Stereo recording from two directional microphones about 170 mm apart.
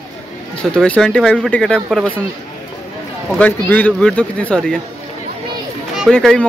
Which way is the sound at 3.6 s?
10° left (ahead or behind).